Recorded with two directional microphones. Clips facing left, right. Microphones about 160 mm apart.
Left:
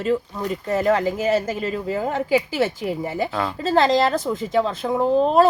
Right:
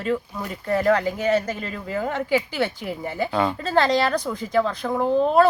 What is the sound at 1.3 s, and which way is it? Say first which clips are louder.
Speech: right 1 dB; 30° left (ahead or behind).